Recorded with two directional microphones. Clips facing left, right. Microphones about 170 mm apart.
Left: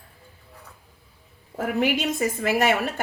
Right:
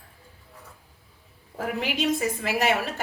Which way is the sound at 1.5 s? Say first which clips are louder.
Left 5 dB; 50° left (ahead or behind).